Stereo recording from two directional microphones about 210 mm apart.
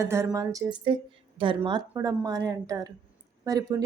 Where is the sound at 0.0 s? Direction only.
15° right (ahead or behind).